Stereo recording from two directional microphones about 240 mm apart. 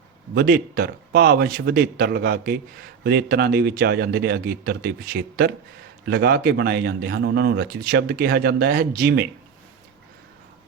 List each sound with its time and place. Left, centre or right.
0.3 s a man's voice: right